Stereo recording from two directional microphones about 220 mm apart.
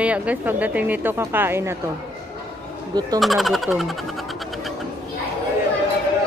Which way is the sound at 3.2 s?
Centre (ahead or behind).